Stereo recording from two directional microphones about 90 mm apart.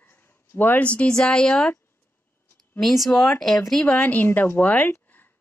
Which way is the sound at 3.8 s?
15° left (ahead or behind).